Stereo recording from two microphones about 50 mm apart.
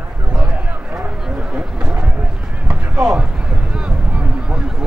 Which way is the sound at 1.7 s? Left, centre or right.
Centre.